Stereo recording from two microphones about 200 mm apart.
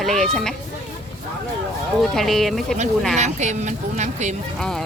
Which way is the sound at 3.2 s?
35° right (ahead or behind).